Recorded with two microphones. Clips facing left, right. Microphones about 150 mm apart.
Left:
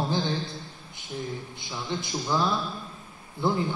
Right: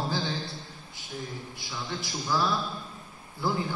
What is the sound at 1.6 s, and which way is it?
A man's voice, 20° left (ahead or behind).